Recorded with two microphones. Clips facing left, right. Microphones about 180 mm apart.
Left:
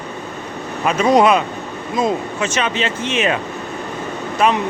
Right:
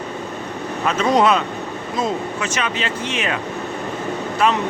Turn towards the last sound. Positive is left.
turn(degrees=20)  # may be behind; listen again after turning